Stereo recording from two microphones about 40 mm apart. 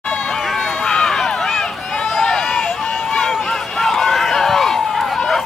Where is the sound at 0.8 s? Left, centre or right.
Centre.